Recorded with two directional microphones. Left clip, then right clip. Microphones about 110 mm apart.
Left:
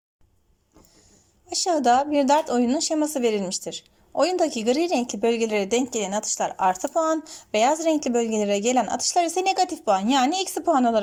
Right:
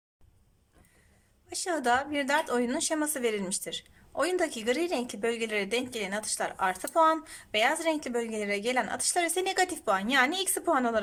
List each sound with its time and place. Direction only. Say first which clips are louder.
1.5 s a woman's voice: left 8 dB; 25° left (ahead or behind)